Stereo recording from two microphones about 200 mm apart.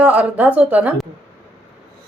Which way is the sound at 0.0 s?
5° right (ahead or behind).